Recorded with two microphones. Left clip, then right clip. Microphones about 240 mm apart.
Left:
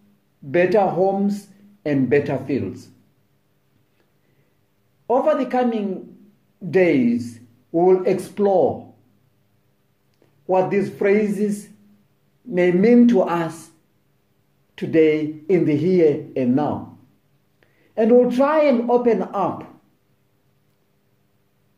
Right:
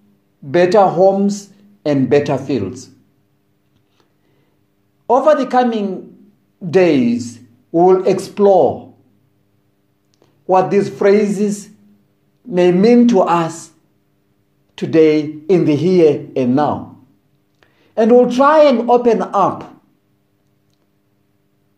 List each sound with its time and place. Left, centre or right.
0.5 s speech: centre
5.0 s speech: centre
10.1 s a man's voice: centre
14.8 s speech: centre